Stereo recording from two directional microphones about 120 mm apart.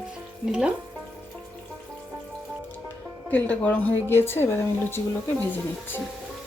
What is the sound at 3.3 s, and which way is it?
A woman's voice, 15° left (ahead or behind).